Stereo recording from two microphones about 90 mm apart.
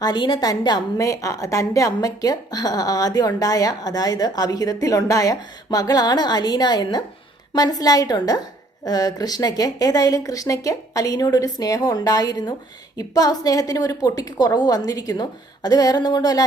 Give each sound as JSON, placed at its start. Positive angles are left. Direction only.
{"t": 0.0, "sound": "a woman's voice", "side_deg": 55}